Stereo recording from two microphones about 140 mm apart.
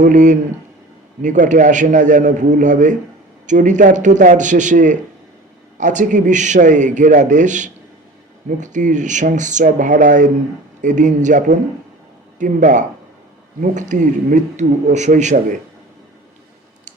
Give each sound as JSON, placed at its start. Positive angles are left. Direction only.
{"t": 0.0, "sound": "a man's voice", "side_deg": -60}